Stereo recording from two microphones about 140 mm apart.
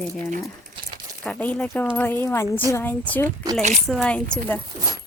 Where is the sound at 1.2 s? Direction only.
10° left (ahead or behind).